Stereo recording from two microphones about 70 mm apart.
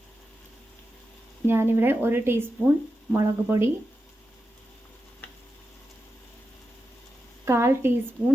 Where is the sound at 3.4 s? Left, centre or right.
Right.